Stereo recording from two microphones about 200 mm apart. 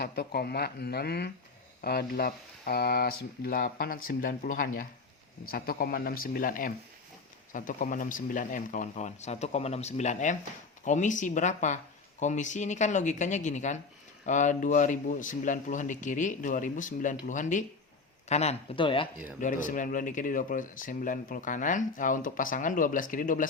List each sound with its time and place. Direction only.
0.0 s speech: 50° left (ahead or behind); by 19.0 s 25° left (ahead or behind)
19.4 s speech: 40° left (ahead or behind)